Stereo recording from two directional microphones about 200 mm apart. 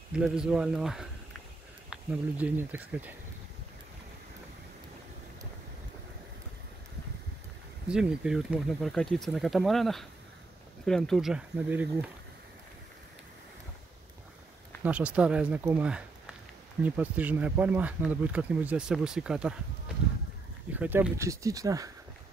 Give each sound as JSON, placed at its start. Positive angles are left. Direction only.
{"t": 0.1, "sound": "speech", "side_deg": -5}
{"t": 7.9, "sound": "speech", "side_deg": -5}
{"t": 14.8, "sound": "speech", "side_deg": -5}
{"t": 20.7, "sound": "speech", "side_deg": -10}